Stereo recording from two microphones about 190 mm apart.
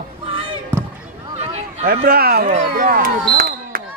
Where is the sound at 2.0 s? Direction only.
50° right (ahead or behind).